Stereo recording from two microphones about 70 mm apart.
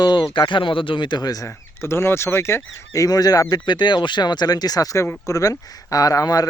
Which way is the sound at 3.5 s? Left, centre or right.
Left.